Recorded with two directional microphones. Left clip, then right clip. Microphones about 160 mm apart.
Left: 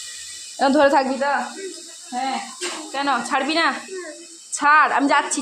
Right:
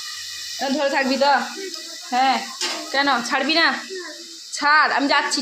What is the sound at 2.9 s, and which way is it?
A woman's voice, 10° right (ahead or behind).